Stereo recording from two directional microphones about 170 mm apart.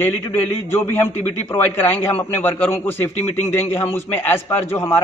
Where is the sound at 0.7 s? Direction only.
10° left (ahead or behind).